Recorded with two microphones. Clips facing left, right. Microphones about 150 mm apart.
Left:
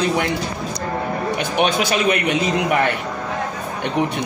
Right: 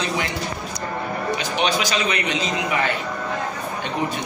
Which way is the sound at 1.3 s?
55° left (ahead or behind).